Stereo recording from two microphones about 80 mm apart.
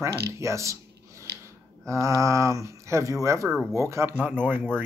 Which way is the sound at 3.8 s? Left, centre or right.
Right.